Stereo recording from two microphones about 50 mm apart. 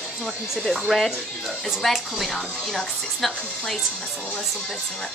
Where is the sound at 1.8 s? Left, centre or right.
Centre.